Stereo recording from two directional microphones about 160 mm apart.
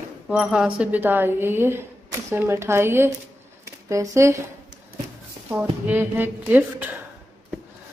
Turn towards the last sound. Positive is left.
turn(degrees=-10)  # may be behind; listen again after turning